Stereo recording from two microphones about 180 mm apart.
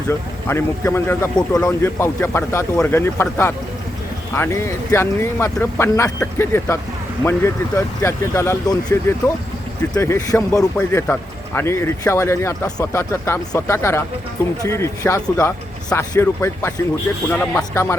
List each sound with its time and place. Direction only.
0.4 s speech: 15° left (ahead or behind)